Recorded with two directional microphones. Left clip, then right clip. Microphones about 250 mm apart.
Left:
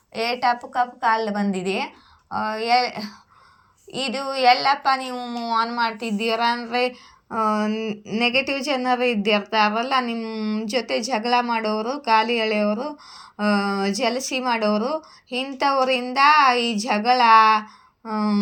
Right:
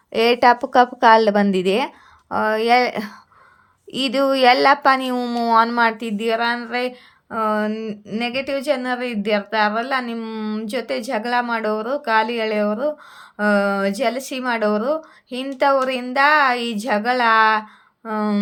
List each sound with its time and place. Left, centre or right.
0.1 s a woman's voice: right
0.5 s speech: right
1.5 s speech: centre
4.5 s speech: right
4.8 s speech: centre